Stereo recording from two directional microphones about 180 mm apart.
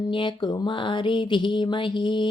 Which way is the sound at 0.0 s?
25° left (ahead or behind).